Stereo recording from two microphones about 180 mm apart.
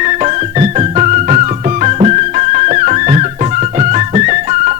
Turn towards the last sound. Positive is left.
turn(degrees=-40)  # may be behind; listen again after turning